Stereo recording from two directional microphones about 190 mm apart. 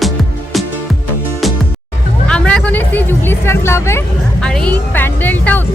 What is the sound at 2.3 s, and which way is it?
Vehicle, 5° left (ahead or behind).